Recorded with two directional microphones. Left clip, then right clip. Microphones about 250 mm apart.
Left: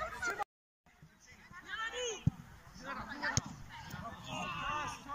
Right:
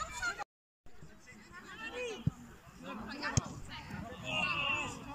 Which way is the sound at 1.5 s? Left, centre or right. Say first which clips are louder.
Left 4 dB; right.